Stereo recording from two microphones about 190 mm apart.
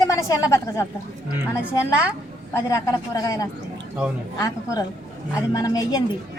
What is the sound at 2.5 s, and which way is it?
A woman's voice, 15° left (ahead or behind).